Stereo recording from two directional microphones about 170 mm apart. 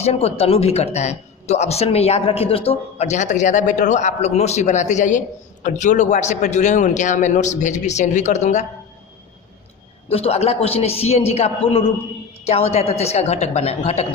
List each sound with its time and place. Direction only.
0.0 s a man's voice: 35° left (ahead or behind)
10.1 s speech: 35° left (ahead or behind)